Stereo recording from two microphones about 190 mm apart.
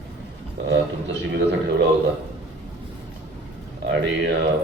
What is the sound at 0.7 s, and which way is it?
A man's voice, 70° right (ahead or behind).